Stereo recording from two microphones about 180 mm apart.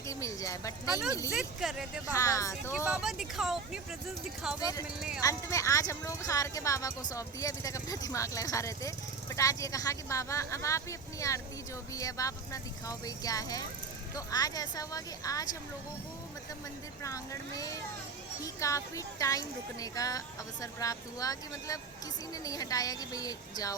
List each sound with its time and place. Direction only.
0.1 s speech: 15° left (ahead or behind)
1.3 s speech: 5° right (ahead or behind)
2.1 s speech: 20° left (ahead or behind)
2.7 s speech: 10° right (ahead or behind)
4.6 s speech: 20° left (ahead or behind)
4.9 s speech: 5° right (ahead or behind)
5.2 s speech: 15° left (ahead or behind)
17.0 s speech: 20° left (ahead or behind)